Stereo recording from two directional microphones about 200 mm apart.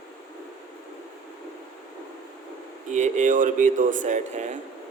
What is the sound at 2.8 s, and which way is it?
A man's voice, 35° right (ahead or behind).